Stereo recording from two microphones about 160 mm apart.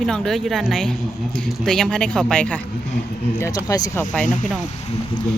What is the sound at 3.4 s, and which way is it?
Speech, 25° left (ahead or behind).